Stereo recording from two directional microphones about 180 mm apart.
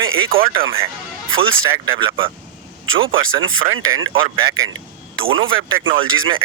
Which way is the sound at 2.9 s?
25° right (ahead or behind).